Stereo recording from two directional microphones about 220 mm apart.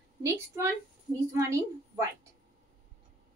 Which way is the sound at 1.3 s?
10° right (ahead or behind).